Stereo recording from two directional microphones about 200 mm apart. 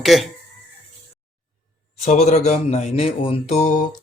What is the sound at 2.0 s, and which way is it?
Speech, 35° left (ahead or behind).